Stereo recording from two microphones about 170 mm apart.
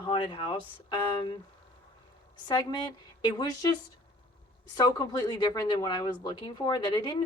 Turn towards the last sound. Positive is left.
turn(degrees=25)  # may be behind; listen again after turning